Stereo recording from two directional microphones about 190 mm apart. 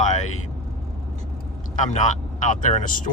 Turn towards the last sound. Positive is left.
turn(degrees=45)  # may be behind; listen again after turning